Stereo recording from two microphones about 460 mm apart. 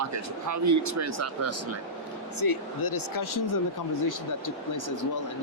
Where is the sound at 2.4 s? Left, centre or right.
Left.